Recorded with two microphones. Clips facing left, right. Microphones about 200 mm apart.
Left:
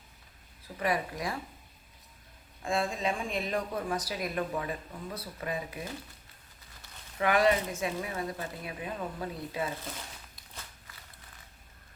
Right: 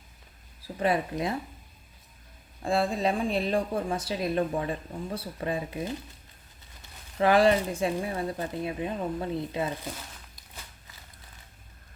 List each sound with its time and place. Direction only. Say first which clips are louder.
0.8 s speech: right 5 dB; 25° right (ahead or behind)
2.6 s speech: right 5 dB; 35° right (ahead or behind)
7.2 s speech: right 5 dB; 30° right (ahead or behind)